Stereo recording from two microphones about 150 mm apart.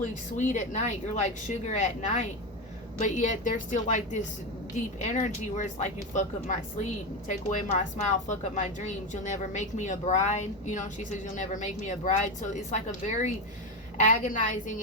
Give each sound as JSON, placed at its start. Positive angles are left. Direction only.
{"t": 0.0, "sound": "a woman's voice", "side_deg": 55}